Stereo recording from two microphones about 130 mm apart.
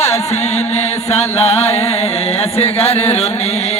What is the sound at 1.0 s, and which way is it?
Chant, 50° left (ahead or behind).